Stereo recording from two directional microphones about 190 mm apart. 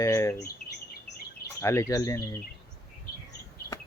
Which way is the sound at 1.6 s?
15° left (ahead or behind).